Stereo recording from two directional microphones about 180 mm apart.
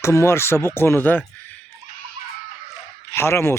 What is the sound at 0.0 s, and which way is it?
Speech, 15° left (ahead or behind).